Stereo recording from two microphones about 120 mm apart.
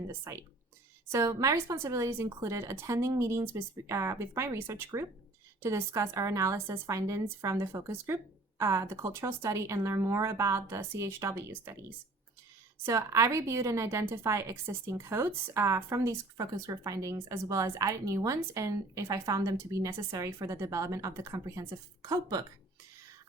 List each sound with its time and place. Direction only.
0.1 s a woman's voice: 25° right (ahead or behind)
12.8 s a woman's voice: 25° right (ahead or behind)